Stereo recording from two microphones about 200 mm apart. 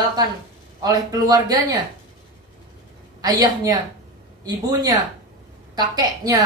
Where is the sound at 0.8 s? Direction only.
20° right (ahead or behind).